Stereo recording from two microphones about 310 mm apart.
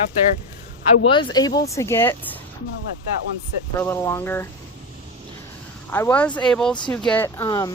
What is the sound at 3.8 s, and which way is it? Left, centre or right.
Speech, centre.